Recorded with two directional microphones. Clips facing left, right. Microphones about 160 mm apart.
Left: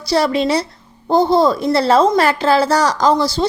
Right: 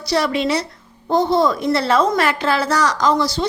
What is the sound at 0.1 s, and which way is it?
A woman's voice, 35° left (ahead or behind).